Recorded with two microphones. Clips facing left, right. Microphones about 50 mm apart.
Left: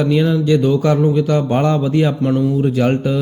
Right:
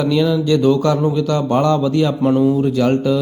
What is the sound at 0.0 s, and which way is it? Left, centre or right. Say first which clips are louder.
Speech: even; left.